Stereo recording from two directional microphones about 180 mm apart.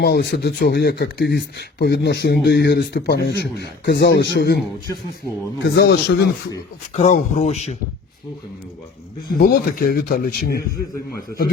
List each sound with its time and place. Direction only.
0.0 s speech: 65° left (ahead or behind)
5.6 s speech: 65° left (ahead or behind)
6.9 s speech: 40° left (ahead or behind)
9.4 s speech: 55° left (ahead or behind)